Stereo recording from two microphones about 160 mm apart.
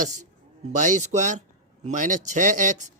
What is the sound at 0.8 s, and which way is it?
Speech, 50° right (ahead or behind).